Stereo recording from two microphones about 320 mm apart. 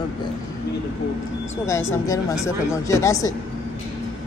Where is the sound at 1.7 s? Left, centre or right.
Centre.